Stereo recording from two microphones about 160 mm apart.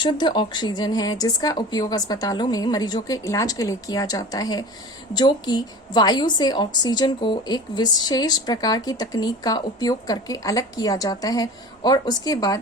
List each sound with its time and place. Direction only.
0.0 s a woman's voice: 30° left (ahead or behind)